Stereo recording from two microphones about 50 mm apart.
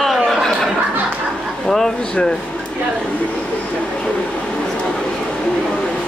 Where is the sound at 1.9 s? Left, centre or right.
Centre.